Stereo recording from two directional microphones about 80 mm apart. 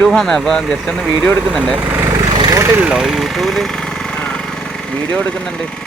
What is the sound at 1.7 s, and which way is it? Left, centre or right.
Speech, right.